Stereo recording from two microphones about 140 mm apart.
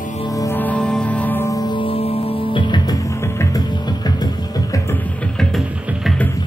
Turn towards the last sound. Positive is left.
turn(degrees=25)  # may be behind; listen again after turning